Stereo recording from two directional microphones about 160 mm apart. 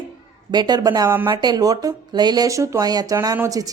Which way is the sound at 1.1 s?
15° right (ahead or behind).